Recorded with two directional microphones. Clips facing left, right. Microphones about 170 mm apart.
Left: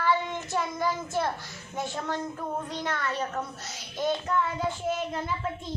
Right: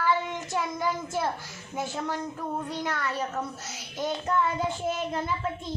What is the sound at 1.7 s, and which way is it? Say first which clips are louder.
A child's voice: even; 10° right (ahead or behind).